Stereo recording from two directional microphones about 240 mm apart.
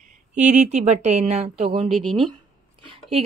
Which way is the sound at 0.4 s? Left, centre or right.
Right.